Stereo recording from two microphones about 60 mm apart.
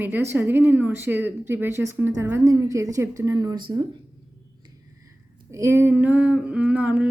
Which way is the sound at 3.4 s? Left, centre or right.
Right.